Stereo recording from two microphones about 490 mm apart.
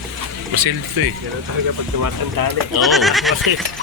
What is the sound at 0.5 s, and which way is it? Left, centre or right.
Speech, right.